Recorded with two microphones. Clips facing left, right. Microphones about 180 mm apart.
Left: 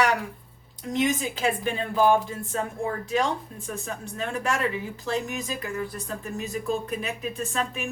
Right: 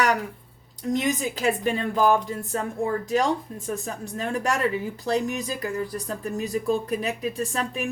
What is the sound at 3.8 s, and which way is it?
Speech, 40° right (ahead or behind).